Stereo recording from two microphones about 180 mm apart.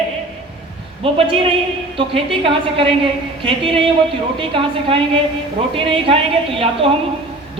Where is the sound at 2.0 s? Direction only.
30° right (ahead or behind).